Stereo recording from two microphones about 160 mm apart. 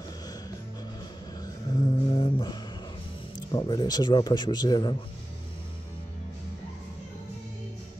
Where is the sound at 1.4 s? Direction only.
25° left (ahead or behind).